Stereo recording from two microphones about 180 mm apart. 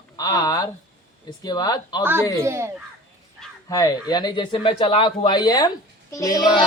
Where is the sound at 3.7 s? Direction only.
20° left (ahead or behind).